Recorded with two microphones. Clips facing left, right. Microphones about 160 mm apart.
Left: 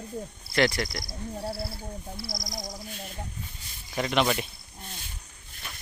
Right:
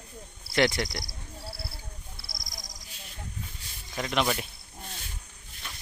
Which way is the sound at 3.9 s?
Centre (ahead or behind).